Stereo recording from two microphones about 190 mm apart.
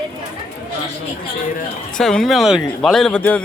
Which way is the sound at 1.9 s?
5° left (ahead or behind).